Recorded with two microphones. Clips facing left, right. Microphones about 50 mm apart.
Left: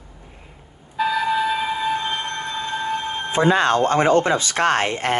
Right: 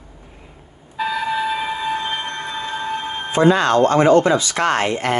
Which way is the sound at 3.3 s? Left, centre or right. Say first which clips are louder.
Right 3 dB; left.